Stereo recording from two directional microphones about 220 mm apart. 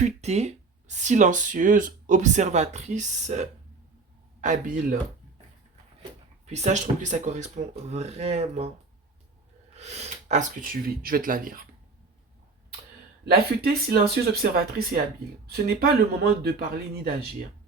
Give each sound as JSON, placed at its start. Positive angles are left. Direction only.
{"t": 0.0, "sound": "a man's voice", "side_deg": -30}
{"t": 6.4, "sound": "speech", "side_deg": -30}
{"t": 9.7, "sound": "speech", "side_deg": -30}
{"t": 13.2, "sound": "speech", "side_deg": -45}